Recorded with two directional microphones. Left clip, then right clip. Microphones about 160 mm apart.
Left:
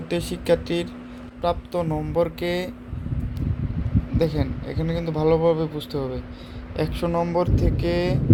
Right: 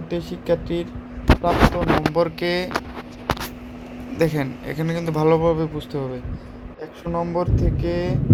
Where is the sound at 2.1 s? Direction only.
10° left (ahead or behind).